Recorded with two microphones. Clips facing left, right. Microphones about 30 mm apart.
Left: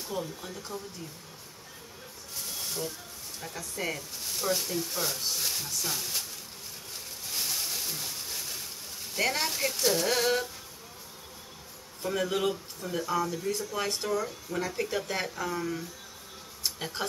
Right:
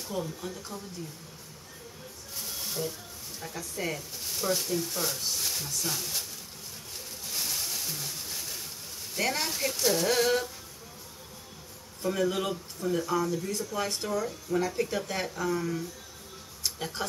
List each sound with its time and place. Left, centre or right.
0.0 s speech: centre
2.3 s a sound: centre
3.3 s speech: centre
7.2 s a sound: centre
9.1 s speech: centre
12.0 s speech: centre
16.6 s music: centre